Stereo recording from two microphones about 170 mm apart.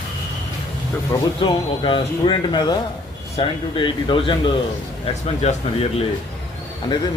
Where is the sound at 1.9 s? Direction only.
30° left (ahead or behind).